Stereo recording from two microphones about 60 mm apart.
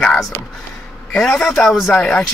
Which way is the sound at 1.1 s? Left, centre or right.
Centre.